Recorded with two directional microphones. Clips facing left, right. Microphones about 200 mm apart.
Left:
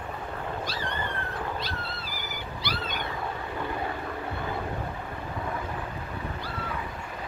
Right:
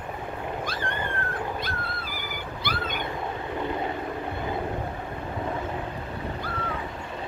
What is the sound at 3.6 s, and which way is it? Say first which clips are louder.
Vehicle: right 3 dB; 20° right (ahead or behind).